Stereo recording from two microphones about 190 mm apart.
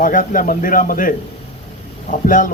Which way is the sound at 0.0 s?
45° left (ahead or behind).